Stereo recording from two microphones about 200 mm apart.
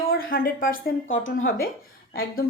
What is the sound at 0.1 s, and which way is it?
Speech, 50° left (ahead or behind).